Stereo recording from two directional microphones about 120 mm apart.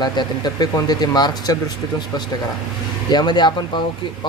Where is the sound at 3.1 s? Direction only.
35° left (ahead or behind).